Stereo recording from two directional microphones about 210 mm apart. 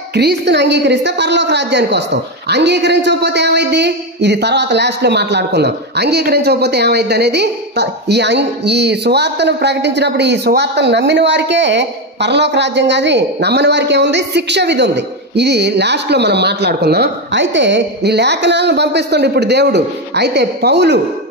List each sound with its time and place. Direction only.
0.1 s a woman's voice: 50° right (ahead or behind)